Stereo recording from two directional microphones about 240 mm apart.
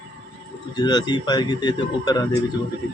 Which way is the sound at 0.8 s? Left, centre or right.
Centre.